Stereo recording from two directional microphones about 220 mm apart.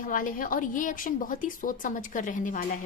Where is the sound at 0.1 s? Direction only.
40° left (ahead or behind).